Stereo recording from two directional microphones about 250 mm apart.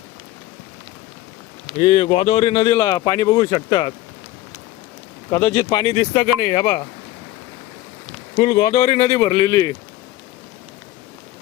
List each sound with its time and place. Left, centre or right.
1.7 s speech: left
5.3 s speech: centre
8.4 s speech: centre